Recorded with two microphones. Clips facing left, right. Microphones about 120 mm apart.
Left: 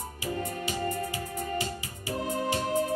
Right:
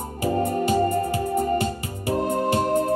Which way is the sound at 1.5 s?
50° right (ahead or behind).